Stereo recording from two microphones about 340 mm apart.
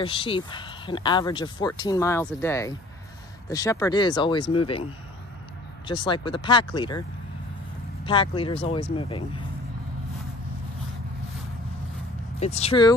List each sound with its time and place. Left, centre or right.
0.0 s speech: centre
5.9 s speech: centre
12.4 s speech: centre